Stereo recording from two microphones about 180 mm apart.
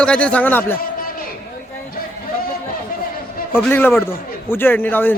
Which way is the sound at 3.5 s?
10° left (ahead or behind).